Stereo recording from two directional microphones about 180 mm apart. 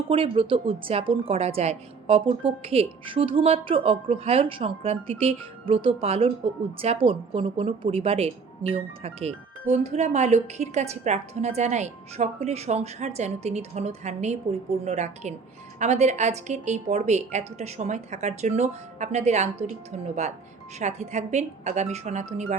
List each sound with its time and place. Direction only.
0.1 s a woman's voice: 30° right (ahead or behind)